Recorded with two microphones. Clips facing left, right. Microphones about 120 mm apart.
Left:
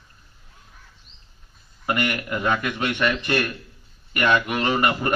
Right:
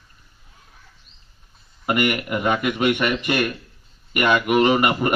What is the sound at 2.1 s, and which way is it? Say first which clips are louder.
A man's voice: right 2 dB; 15° right (ahead or behind).